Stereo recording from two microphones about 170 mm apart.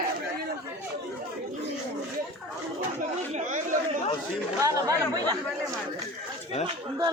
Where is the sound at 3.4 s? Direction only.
45° right (ahead or behind).